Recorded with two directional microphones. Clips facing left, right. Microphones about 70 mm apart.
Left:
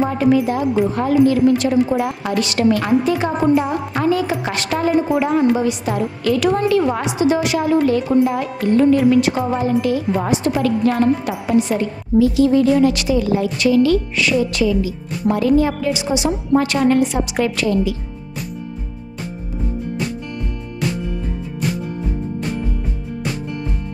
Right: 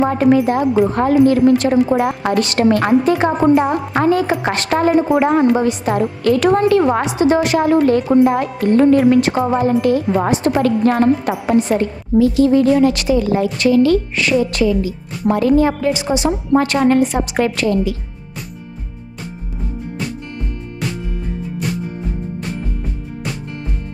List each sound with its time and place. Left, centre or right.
0.0 s a woman's voice: right